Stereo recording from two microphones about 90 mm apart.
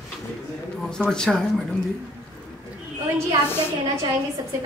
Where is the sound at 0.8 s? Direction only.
10° left (ahead or behind).